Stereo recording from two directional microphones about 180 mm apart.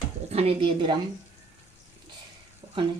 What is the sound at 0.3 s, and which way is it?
Speech, 35° right (ahead or behind).